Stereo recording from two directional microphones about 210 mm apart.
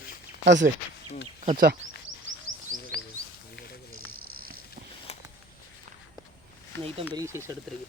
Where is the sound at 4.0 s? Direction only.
85° right.